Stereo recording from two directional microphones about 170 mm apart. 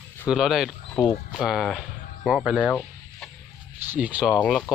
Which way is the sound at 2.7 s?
5° left (ahead or behind).